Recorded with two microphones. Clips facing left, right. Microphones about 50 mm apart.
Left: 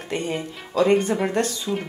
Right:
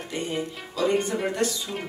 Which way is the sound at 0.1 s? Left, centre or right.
Left.